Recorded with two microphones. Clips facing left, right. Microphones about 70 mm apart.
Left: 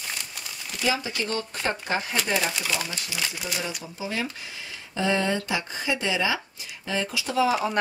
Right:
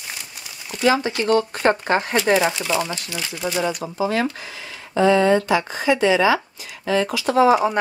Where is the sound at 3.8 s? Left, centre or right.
Right.